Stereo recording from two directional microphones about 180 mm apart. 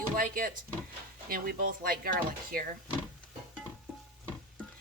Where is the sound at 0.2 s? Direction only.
50° right (ahead or behind).